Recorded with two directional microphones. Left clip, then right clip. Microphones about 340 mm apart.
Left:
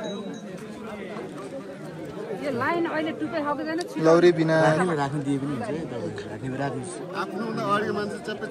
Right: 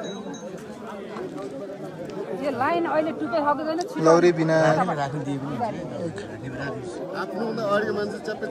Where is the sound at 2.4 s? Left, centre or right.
Right.